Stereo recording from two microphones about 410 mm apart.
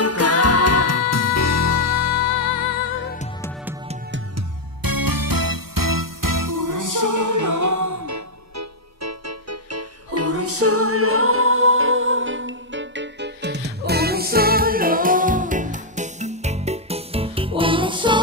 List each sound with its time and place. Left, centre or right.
0.0 s music: left
4.8 s music: right; by 18.2 s centre